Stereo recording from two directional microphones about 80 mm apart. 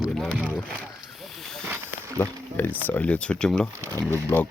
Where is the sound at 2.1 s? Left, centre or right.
Left.